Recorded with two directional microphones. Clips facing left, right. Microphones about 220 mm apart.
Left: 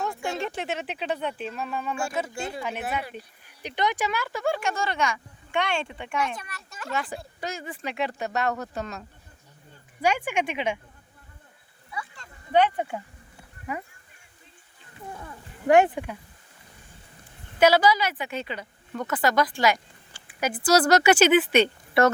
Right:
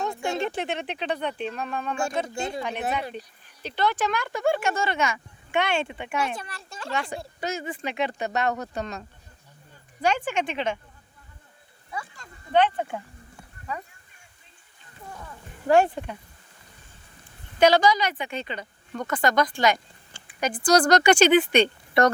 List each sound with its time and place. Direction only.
0.0 s a sound: 20° right (ahead or behind)
0.3 s speech: centre (ahead or behind)
3.4 s speech: 15° left (ahead or behind); by 6.1 s 5° right (ahead or behind)
6.1 s speech: 30° right (ahead or behind)
6.9 s speech: 5° left (ahead or behind)
11.9 s a sound: 45° right (ahead or behind)
12.5 s speech: 10° left (ahead or behind)
15.6 s speech: 15° left (ahead or behind)
17.6 s speech: 5° left (ahead or behind)